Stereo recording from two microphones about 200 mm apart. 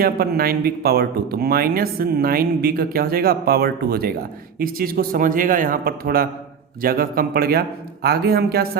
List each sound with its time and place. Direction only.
0.0 s speech: 50° right (ahead or behind)